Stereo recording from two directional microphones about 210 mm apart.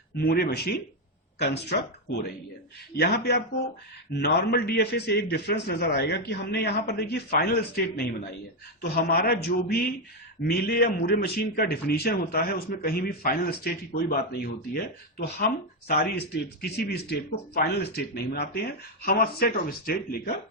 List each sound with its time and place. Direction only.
0.2 s a man's voice: 45° left (ahead or behind)
2.9 s a man's voice: 50° left (ahead or behind)